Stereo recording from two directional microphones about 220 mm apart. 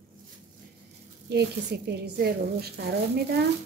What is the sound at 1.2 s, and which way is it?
A woman's voice, 50° right (ahead or behind).